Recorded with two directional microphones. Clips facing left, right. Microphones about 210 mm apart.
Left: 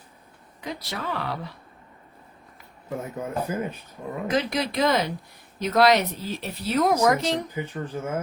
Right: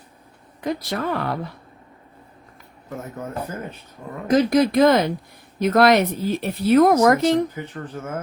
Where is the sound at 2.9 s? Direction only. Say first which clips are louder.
Left 1 dB; 10° left (ahead or behind).